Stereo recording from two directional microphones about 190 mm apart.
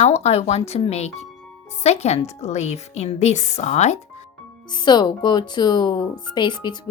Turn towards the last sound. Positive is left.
turn(degrees=25)  # may be behind; listen again after turning